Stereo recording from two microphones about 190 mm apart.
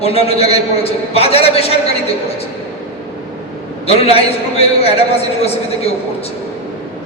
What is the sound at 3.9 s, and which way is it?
A man's voice, 30° left (ahead or behind).